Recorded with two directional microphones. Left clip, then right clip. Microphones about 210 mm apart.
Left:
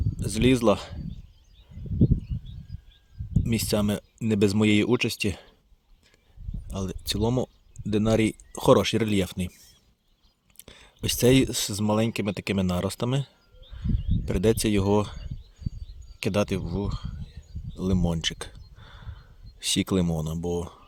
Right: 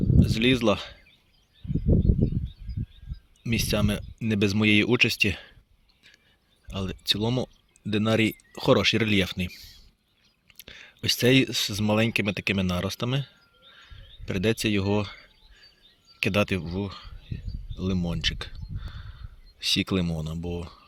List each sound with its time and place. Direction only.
0.2 s speech: 15° left (ahead or behind)
3.4 s speech: 15° left (ahead or behind)
6.7 s speech: 10° left (ahead or behind)
10.6 s speech: 10° left (ahead or behind)
13.7 s a sound: 10° left (ahead or behind)
16.2 s speech: 5° left (ahead or behind)
17.7 s a sound: 15° left (ahead or behind)
19.7 s speech: 15° left (ahead or behind)